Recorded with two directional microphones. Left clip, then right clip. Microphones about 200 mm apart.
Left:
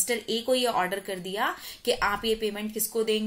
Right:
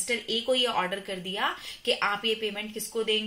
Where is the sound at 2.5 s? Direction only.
40° left (ahead or behind).